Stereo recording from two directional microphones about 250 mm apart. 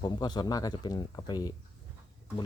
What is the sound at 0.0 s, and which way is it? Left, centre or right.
Speech, centre.